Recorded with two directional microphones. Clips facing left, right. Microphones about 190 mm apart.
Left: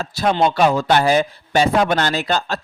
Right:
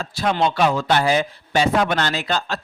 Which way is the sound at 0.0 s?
40° left (ahead or behind).